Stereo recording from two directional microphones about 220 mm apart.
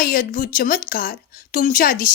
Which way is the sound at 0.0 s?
40° left (ahead or behind).